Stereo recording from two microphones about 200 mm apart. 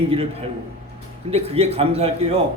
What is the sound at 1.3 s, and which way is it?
Speech, 30° right (ahead or behind).